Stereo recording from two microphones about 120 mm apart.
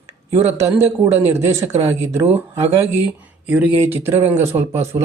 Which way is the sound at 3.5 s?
10° right (ahead or behind).